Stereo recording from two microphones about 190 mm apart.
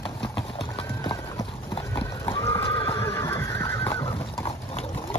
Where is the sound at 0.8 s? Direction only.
25° left (ahead or behind).